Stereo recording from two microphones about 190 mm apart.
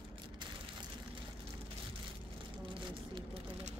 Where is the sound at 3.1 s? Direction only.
30° right (ahead or behind).